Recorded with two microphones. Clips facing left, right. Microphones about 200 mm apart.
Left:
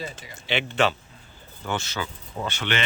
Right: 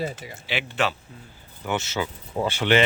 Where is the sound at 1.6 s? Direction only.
20° right (ahead or behind).